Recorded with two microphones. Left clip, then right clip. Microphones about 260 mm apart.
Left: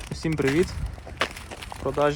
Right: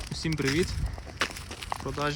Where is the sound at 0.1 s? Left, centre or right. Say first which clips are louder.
Left 5 dB; centre.